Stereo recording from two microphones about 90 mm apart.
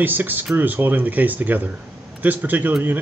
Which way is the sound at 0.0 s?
20° right (ahead or behind).